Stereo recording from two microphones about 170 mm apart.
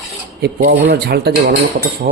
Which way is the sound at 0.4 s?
70° right (ahead or behind).